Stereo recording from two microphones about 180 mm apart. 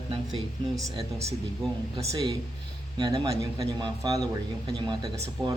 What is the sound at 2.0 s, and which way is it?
Speech, 20° right (ahead or behind).